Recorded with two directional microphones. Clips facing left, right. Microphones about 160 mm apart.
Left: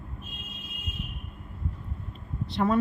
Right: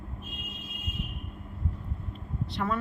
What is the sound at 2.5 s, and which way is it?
Speech, 25° left (ahead or behind).